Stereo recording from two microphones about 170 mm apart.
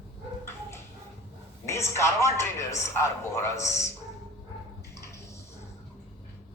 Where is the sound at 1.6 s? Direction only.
15° left (ahead or behind).